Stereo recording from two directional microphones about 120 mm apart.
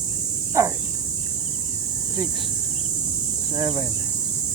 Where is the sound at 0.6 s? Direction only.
25° right (ahead or behind).